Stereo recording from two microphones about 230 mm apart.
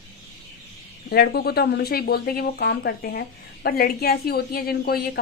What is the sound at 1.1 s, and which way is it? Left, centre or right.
Speech, left.